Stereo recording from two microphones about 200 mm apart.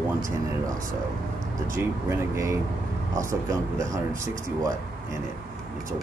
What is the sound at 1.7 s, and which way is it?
Speech, 15° right (ahead or behind).